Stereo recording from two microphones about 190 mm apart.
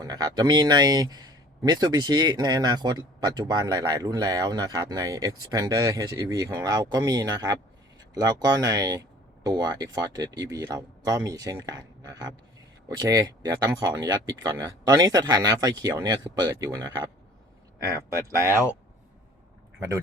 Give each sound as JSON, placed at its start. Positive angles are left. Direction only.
{"t": 0.0, "sound": "speech", "side_deg": -20}